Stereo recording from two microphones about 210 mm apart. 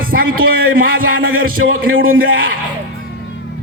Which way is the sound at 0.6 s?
45° right (ahead or behind).